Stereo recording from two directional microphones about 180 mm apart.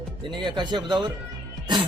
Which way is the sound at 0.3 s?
25° right (ahead or behind).